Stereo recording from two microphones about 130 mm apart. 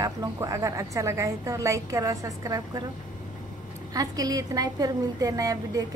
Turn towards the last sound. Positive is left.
turn(degrees=-25)  # may be behind; listen again after turning